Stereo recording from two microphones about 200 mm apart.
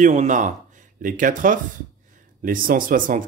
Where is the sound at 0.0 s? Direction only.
40° right (ahead or behind).